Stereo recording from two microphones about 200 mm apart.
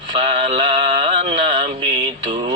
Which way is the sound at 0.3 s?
30° right (ahead or behind).